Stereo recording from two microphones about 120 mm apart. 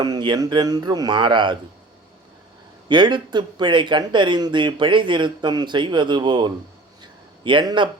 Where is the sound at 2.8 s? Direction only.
40° right (ahead or behind).